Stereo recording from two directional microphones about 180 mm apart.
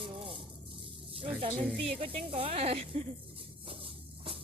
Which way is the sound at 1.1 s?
30° right (ahead or behind).